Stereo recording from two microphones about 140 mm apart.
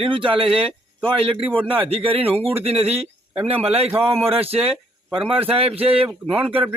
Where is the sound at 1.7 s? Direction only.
40° right (ahead or behind).